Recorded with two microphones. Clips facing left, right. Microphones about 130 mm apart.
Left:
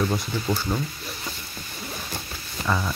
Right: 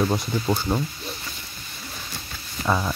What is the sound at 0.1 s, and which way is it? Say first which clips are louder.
Speech: right 2 dB; 25° right (ahead or behind).